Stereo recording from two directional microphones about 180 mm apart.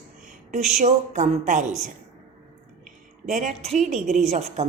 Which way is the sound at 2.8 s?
45° right (ahead or behind).